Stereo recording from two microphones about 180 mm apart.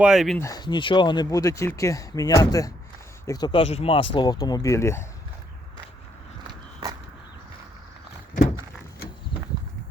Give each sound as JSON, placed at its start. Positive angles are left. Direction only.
{"t": 0.0, "sound": "speech", "side_deg": 0}
{"t": 0.3, "sound": "speech", "side_deg": 20}
{"t": 6.5, "sound": "walk", "side_deg": -20}